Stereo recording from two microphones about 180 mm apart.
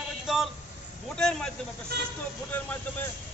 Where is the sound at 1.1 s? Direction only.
5° left (ahead or behind).